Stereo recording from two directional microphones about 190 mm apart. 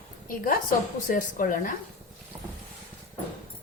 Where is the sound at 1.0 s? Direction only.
45° left (ahead or behind).